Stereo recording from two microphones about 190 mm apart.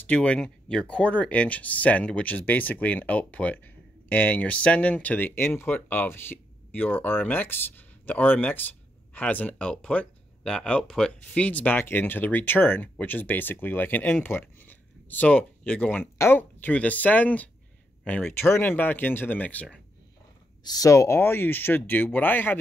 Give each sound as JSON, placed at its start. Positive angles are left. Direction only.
{"t": 0.0, "sound": "speech", "side_deg": 5}
{"t": 20.6, "sound": "speech", "side_deg": 20}